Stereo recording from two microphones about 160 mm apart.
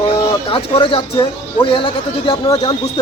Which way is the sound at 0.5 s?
35° left (ahead or behind).